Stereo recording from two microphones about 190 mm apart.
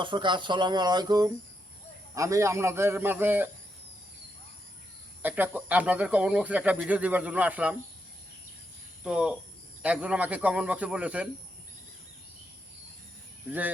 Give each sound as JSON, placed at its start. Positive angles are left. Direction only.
{"t": 0.0, "sound": "speech", "side_deg": -25}
{"t": 5.2, "sound": "speech", "side_deg": -10}
{"t": 9.0, "sound": "speech", "side_deg": -5}
{"t": 13.5, "sound": "speech", "side_deg": -10}